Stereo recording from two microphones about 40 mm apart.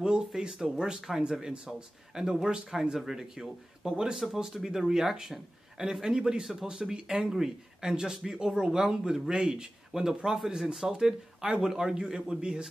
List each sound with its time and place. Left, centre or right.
0.0 s speech: centre
0.4 s speech: centre
1.7 s speech: centre